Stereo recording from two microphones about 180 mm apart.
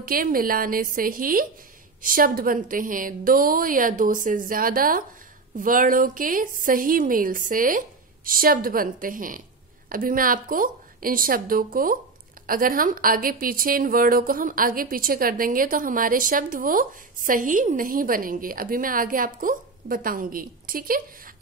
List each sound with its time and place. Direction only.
0.0 s a woman's voice: 55° right (ahead or behind)